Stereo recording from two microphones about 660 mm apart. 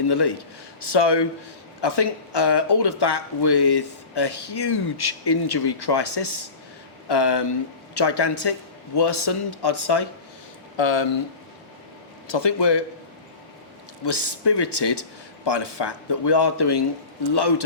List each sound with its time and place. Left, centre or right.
0.1 s speech: left
12.3 s speech: left
14.0 s speech: left